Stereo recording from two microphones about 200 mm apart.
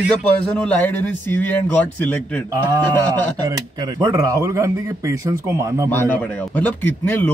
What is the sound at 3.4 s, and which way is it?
Speech, 20° right (ahead or behind).